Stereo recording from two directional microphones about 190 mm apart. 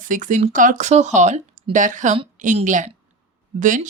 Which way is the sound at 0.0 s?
45° right (ahead or behind).